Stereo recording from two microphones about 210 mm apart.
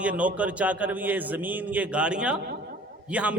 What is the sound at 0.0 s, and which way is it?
A man's voice, 5° right (ahead or behind).